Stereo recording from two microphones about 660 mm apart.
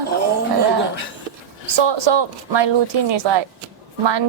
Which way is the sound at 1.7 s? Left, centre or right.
Right.